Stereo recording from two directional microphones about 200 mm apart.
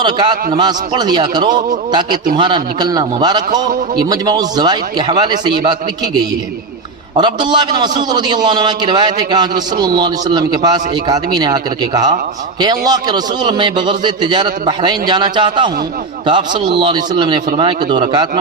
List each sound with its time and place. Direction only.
0.0 s a man's voice: 20° right (ahead or behind)
7.2 s a man's voice: 20° right (ahead or behind)